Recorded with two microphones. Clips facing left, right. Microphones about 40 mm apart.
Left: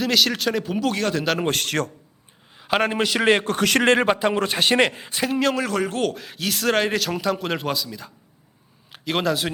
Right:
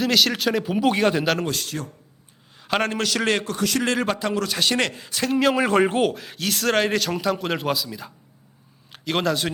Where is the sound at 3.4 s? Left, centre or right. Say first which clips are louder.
Left 4 dB; left.